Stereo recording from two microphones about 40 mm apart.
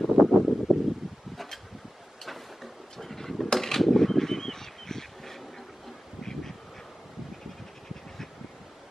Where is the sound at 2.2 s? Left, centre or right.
Centre.